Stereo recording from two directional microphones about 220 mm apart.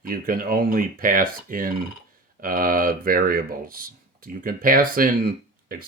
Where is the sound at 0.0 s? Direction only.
40° right (ahead or behind).